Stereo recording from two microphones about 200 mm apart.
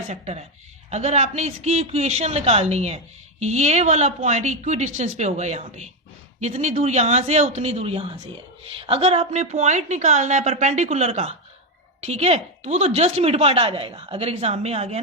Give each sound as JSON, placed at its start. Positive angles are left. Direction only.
{"t": 0.1, "sound": "a woman's voice", "side_deg": -35}